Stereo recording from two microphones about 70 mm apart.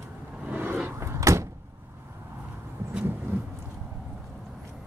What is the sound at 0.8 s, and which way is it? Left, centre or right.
Door, right.